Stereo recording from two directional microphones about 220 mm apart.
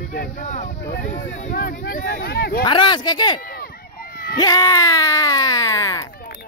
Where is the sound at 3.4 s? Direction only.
40° left (ahead or behind).